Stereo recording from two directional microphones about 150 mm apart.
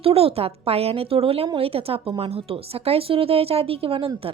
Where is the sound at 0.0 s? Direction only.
40° right (ahead or behind).